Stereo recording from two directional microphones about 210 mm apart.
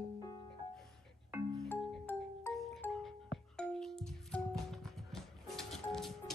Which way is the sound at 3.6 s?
5° left (ahead or behind).